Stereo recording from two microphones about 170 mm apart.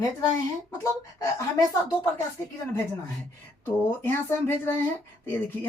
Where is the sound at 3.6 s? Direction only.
10° left (ahead or behind).